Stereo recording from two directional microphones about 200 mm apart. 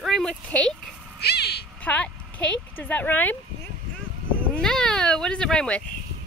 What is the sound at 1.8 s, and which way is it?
Speech, 5° left (ahead or behind).